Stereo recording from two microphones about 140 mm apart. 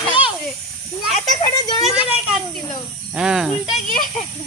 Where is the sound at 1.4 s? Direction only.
35° left (ahead or behind).